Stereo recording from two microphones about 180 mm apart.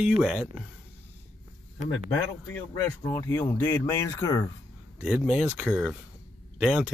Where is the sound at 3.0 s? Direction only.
15° left (ahead or behind).